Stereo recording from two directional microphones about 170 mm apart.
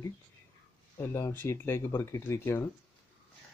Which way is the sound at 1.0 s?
15° left (ahead or behind).